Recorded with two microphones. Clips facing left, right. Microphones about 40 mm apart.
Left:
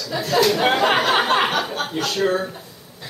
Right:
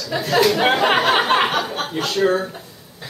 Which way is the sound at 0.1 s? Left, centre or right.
Centre.